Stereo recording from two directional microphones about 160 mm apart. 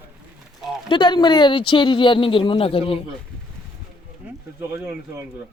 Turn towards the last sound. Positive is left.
turn(degrees=-15)  # may be behind; listen again after turning